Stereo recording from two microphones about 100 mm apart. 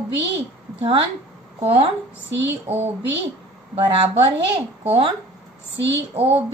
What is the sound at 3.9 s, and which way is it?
Speech, 60° right (ahead or behind).